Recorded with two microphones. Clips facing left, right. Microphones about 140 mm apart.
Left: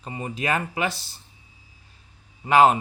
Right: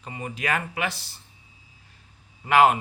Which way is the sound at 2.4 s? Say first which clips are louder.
Left 2 dB; 25° left (ahead or behind).